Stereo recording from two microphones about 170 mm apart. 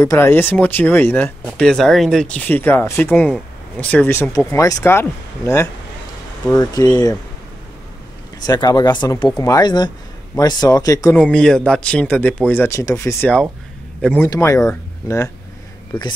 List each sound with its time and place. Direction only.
0.0 s a man's voice: 15° left (ahead or behind)
8.5 s speech: 25° left (ahead or behind)
11.1 s a man's voice: 5° left (ahead or behind)